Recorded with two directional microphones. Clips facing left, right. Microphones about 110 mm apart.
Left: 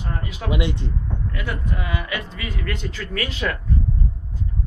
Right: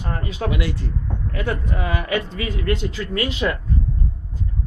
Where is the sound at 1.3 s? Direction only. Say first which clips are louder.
Right 6 dB; 35° right (ahead or behind).